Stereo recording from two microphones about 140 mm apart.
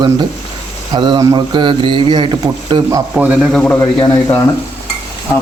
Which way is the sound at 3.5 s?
10° left (ahead or behind).